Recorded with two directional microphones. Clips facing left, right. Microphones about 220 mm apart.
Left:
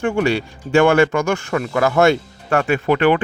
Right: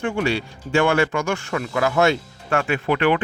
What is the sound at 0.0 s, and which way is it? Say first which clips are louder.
Speech: left 4 dB; 45° left (ahead or behind).